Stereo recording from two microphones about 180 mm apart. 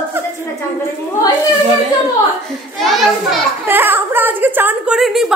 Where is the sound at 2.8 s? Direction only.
Centre (ahead or behind).